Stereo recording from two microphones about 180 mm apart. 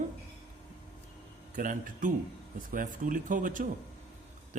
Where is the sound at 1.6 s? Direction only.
45° right (ahead or behind).